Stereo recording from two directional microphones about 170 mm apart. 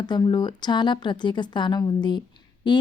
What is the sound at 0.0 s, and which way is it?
Speech, 25° left (ahead or behind).